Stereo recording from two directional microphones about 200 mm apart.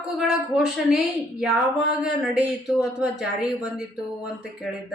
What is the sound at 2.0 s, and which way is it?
Speech, 5° right (ahead or behind).